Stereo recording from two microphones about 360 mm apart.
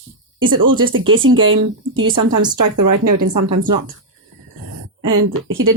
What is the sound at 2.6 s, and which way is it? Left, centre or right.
Speech, right.